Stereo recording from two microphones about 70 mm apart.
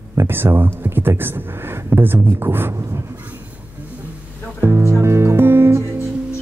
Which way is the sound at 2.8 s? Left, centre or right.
Right.